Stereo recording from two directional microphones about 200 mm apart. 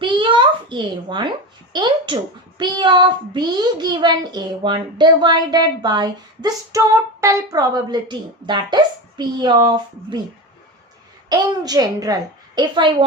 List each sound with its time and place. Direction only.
0.0 s a sound: 25° right (ahead or behind)
1.7 s a child's voice: 25° right (ahead or behind)
11.3 s a child's voice: 20° right (ahead or behind)